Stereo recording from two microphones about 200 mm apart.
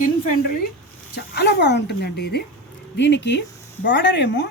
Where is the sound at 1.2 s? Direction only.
55° left (ahead or behind).